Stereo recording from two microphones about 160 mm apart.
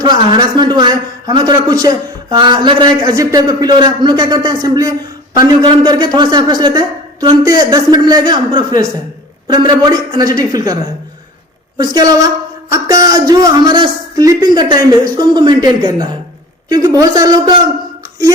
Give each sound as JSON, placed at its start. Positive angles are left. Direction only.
{"t": 0.0, "sound": "a man's voice", "side_deg": -30}
{"t": 11.8, "sound": "a man's voice", "side_deg": -25}